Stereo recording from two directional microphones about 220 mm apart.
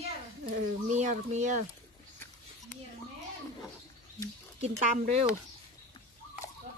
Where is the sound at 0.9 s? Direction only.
35° right (ahead or behind).